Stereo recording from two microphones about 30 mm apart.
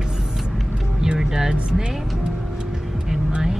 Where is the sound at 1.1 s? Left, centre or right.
Centre.